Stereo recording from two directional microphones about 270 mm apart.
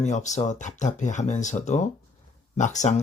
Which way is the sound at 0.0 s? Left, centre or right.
Left.